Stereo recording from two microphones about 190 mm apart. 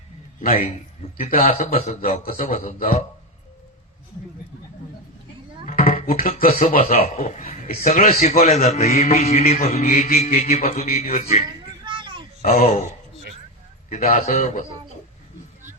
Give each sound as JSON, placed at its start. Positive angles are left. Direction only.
{"t": 1.3, "sound": "a man's voice", "side_deg": 50}
{"t": 5.6, "sound": "a sound", "side_deg": 45}
{"t": 6.6, "sound": "a man's voice", "side_deg": 40}
{"t": 9.7, "sound": "a man's voice", "side_deg": 50}
{"t": 10.2, "sound": "a man's voice", "side_deg": 35}
{"t": 11.9, "sound": "a sound", "side_deg": -25}
{"t": 12.4, "sound": "a man's voice", "side_deg": 40}
{"t": 13.9, "sound": "a man's voice", "side_deg": 40}